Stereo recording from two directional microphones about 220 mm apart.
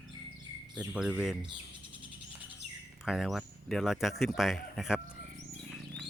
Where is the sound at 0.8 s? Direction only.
5° right (ahead or behind).